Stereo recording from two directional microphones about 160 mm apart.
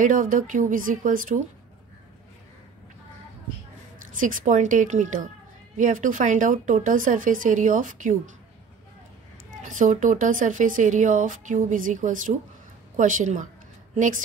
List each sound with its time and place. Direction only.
0.0 s speech: 55° right (ahead or behind)
4.2 s speech: 55° right (ahead or behind)
9.6 s speech: 55° right (ahead or behind)